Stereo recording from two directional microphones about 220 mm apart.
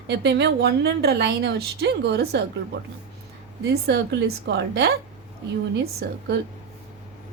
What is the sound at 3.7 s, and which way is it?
A woman's voice, 50° right (ahead or behind).